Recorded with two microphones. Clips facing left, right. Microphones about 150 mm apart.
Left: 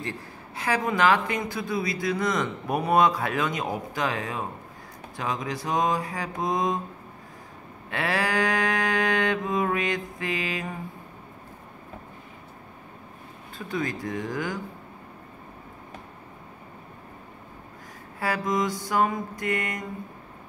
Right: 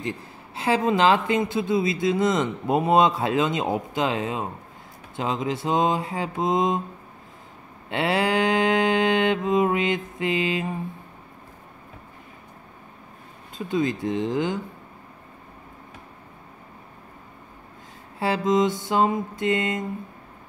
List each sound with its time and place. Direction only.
0.0 s speech: 20° right (ahead or behind)
7.9 s speech: 25° right (ahead or behind)
13.6 s speech: 20° right (ahead or behind)
18.2 s speech: 25° right (ahead or behind)